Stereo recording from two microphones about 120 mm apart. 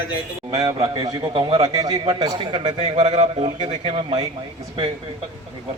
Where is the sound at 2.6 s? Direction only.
55° right (ahead or behind).